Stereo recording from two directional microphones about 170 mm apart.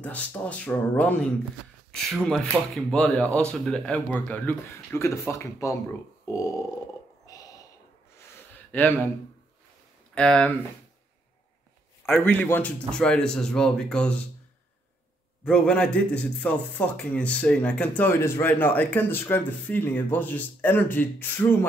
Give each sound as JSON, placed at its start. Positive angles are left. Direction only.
{"t": 0.0, "sound": "a man's voice", "side_deg": 10}
{"t": 7.2, "sound": "a sound", "side_deg": 20}
{"t": 10.1, "sound": "a man's voice", "side_deg": 5}
{"t": 12.1, "sound": "a man's voice", "side_deg": 10}
{"t": 15.4, "sound": "speech", "side_deg": 5}